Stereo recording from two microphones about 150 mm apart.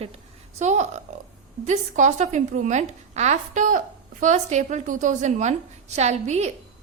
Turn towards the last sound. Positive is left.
turn(degrees=-50)  # may be behind; listen again after turning